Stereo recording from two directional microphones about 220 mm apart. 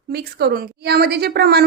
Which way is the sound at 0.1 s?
45° right (ahead or behind).